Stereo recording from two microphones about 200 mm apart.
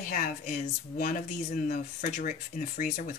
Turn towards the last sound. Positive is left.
turn(degrees=40)  # may be behind; listen again after turning